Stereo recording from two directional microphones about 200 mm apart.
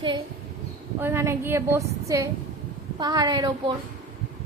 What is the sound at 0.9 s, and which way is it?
A woman's voice, 10° right (ahead or behind).